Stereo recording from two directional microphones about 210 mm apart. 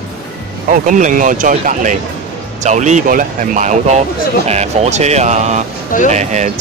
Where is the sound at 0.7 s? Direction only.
35° right (ahead or behind).